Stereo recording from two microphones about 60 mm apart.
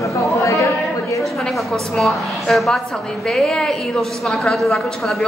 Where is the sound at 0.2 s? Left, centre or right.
Left.